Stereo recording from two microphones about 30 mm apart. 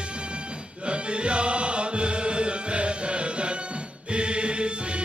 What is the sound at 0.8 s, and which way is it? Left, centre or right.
Music, right.